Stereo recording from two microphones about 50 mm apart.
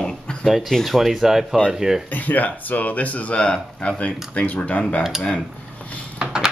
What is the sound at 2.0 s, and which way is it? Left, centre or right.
Speech, left.